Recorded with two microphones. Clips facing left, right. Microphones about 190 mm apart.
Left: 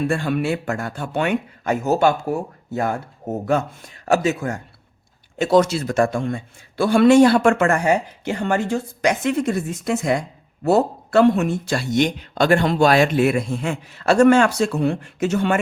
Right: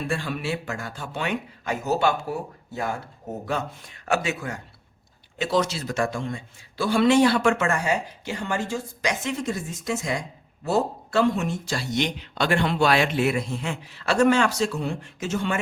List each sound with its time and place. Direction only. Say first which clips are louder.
0.1 s speech: left 7 dB; 55° left (ahead or behind)